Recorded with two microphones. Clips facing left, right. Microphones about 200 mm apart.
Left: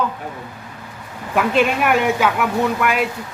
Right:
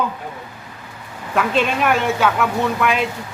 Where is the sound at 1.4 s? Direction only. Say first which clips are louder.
Left 2 dB; 10° left (ahead or behind).